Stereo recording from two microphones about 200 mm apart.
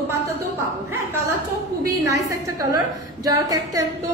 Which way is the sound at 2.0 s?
15° right (ahead or behind).